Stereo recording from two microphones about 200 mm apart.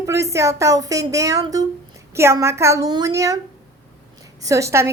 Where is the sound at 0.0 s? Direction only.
15° right (ahead or behind).